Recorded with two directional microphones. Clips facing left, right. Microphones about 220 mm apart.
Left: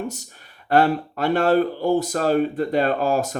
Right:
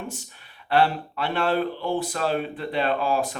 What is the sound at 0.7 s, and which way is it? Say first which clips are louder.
Speech: left 4 dB; 45° left (ahead or behind).